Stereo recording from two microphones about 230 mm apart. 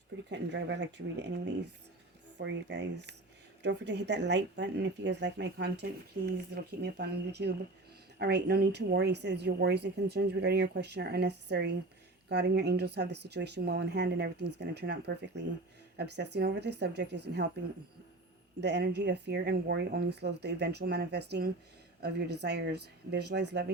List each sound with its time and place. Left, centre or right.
0.3 s speech: right
18.6 s speech: right